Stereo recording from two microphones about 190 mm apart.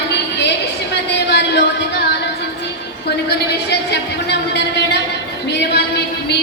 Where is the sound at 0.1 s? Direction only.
65° left (ahead or behind).